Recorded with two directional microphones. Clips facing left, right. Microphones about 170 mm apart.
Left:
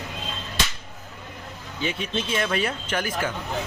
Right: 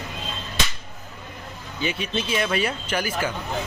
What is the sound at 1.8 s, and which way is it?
Speech, 5° right (ahead or behind).